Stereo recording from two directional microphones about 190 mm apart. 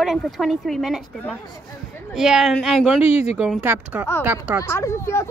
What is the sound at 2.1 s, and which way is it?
Speech, 5° right (ahead or behind).